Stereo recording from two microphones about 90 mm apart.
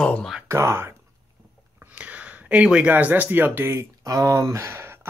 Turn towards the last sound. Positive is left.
turn(degrees=-25)  # may be behind; listen again after turning